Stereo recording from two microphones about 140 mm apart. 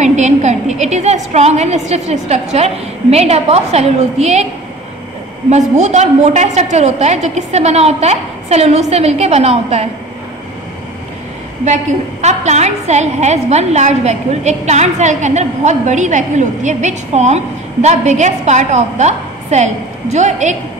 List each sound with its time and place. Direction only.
0.0 s a woman's voice: 55° right (ahead or behind)
5.5 s a woman's voice: 55° right (ahead or behind)
11.6 s a woman's voice: 55° right (ahead or behind)